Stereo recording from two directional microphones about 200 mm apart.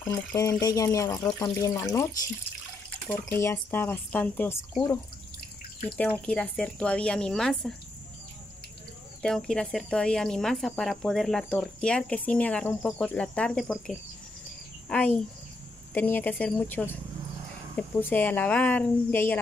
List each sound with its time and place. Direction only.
0.0 s speech: 15° left (ahead or behind)
3.1 s speech: 15° left (ahead or behind)
5.9 s speech: 10° left (ahead or behind)
9.2 s speech: 5° left (ahead or behind)